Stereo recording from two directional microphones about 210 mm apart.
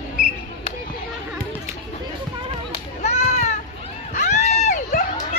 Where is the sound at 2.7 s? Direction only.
30° left (ahead or behind).